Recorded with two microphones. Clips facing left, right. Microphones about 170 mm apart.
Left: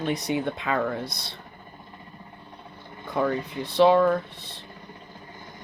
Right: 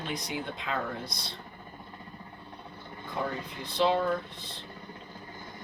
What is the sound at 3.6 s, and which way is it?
Speech, 65° left (ahead or behind).